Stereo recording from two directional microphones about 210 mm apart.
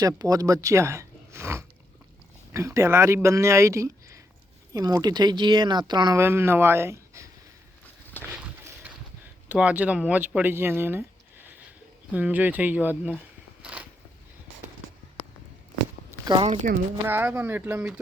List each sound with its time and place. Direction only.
0.0 s speech: 15° right (ahead or behind)
8.3 s a sound: 10° right (ahead or behind)
9.5 s speech: 5° right (ahead or behind)
12.1 s speech: 10° right (ahead or behind)
13.6 s a sound: 5° right (ahead or behind)
16.2 s speech: 15° right (ahead or behind)